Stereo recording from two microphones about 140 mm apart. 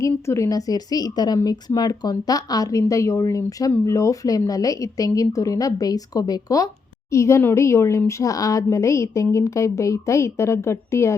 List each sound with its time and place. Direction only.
0.0 s a woman's voice: 20° left (ahead or behind)